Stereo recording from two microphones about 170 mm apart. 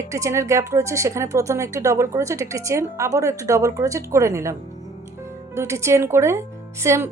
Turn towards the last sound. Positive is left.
turn(degrees=-15)  # may be behind; listen again after turning